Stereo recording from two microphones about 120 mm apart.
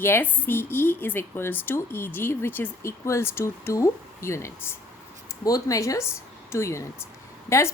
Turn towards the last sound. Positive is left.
turn(degrees=25)  # may be behind; listen again after turning